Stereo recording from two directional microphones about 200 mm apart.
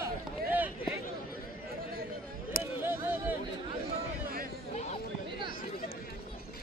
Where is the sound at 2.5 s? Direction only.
50° left (ahead or behind).